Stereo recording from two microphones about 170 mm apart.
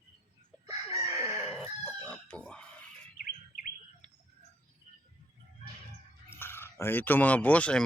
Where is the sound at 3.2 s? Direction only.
55° left (ahead or behind).